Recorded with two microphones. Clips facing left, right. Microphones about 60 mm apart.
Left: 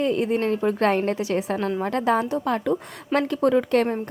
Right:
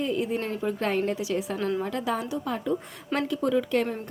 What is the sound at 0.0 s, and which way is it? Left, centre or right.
A woman's voice, left.